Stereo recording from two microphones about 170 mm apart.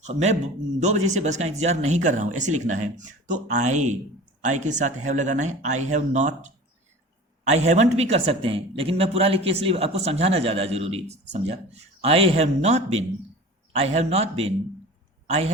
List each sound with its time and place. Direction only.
0.0 s a woman's voice: 40° right (ahead or behind)